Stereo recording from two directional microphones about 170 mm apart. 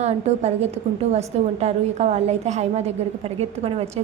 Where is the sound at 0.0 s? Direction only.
40° right (ahead or behind).